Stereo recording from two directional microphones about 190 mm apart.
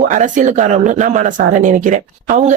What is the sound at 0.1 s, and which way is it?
Speech, 40° right (ahead or behind).